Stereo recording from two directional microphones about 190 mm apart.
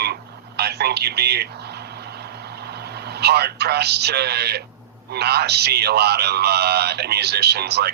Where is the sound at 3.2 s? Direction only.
60° right (ahead or behind).